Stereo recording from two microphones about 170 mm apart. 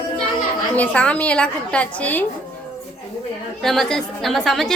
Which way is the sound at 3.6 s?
Centre (ahead or behind).